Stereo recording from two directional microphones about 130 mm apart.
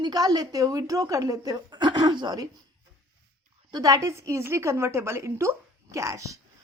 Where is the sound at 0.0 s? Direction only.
30° right (ahead or behind).